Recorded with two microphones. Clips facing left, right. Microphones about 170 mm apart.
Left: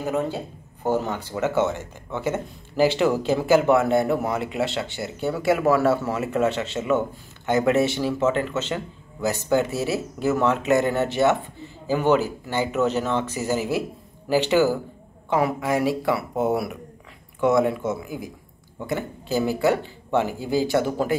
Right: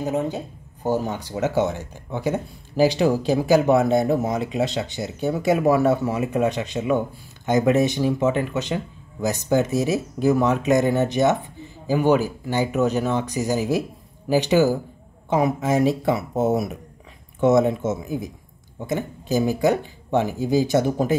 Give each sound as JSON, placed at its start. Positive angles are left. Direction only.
{"t": 0.0, "sound": "speech", "side_deg": -15}